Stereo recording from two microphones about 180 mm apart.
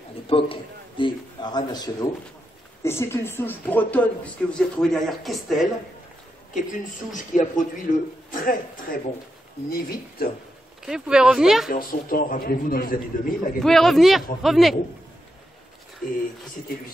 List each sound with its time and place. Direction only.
0.3 s a man's voice: 30° left (ahead or behind); by 5.7 s centre (ahead or behind)
6.5 s a man's voice: 45° left (ahead or behind)
10.8 s speech: 5° right (ahead or behind)
11.7 s a man's voice: 50° left (ahead or behind)
13.6 s speech: centre (ahead or behind)
16.0 s a man's voice: 45° left (ahead or behind)